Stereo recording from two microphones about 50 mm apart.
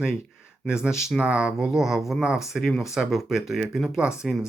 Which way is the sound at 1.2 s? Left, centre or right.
Right.